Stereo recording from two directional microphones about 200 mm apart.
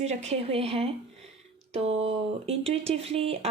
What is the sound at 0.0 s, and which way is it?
Speech, 35° right (ahead or behind).